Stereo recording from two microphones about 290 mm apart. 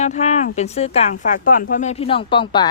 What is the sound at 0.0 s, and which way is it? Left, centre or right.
A woman's voice, left.